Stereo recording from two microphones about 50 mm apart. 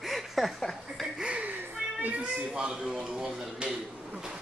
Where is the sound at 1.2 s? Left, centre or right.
Right.